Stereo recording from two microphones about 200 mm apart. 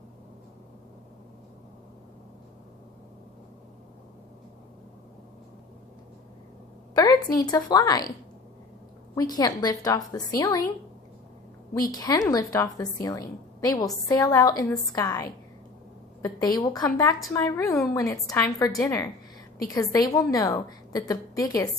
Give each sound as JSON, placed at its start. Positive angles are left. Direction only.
{"t": 6.9, "sound": "a woman's voice", "side_deg": 20}
{"t": 9.1, "sound": "a woman's voice", "side_deg": 20}
{"t": 11.9, "sound": "a woman's voice", "side_deg": 20}